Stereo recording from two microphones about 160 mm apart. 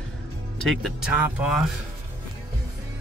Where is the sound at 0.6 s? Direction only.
Centre (ahead or behind).